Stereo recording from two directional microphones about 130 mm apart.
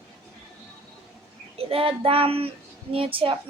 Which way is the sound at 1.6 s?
45° right (ahead or behind).